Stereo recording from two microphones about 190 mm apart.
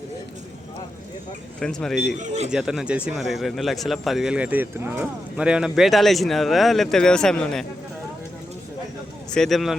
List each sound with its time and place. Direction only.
1.5 s speech: 5° left (ahead or behind)
2.2 s speech: 35° right (ahead or behind)
2.5 s speech: 5° right (ahead or behind)
9.3 s speech: centre (ahead or behind)